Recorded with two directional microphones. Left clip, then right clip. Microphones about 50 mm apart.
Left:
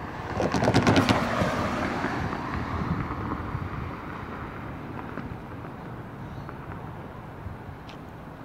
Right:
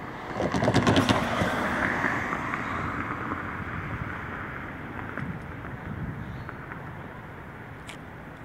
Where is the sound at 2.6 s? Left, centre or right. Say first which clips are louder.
Right 2 dB; centre.